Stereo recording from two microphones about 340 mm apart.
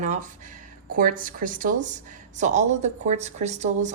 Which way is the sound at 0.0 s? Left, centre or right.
Right.